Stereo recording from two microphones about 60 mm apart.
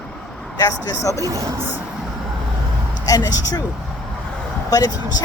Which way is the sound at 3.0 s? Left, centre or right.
Left.